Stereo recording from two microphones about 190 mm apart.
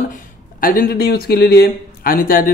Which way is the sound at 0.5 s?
50° left (ahead or behind).